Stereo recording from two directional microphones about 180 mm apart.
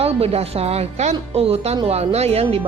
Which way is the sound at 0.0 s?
35° right (ahead or behind).